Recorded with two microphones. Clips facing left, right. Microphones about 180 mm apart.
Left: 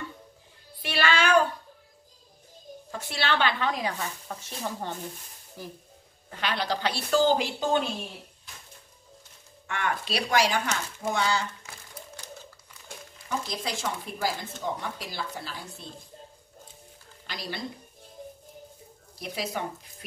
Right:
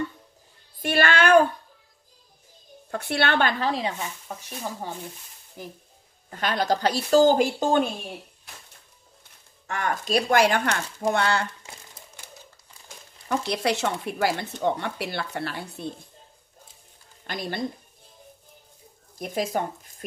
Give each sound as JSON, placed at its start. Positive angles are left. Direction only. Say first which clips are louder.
{"t": 0.7, "sound": "a sound", "louder": "right 4 dB", "side_deg": -50}
{"t": 2.9, "sound": "a woman's voice", "louder": "right 5 dB", "side_deg": -60}
{"t": 4.0, "sound": "speech", "louder": "right 1 dB", "side_deg": -15}
{"t": 5.6, "sound": "speech", "louder": "right 1 dB", "side_deg": -20}
{"t": 6.3, "sound": "a woman's voice", "louder": "right 5 dB", "side_deg": -45}
{"t": 9.7, "sound": "a woman's voice", "louder": "right 4 dB", "side_deg": -40}
{"t": 13.3, "sound": "speech", "louder": "right 7 dB", "side_deg": -70}
{"t": 17.3, "sound": "a woman's voice", "louder": "right 6 dB", "side_deg": -50}
{"t": 19.1, "sound": "speech", "louder": "right 6 dB", "side_deg": -50}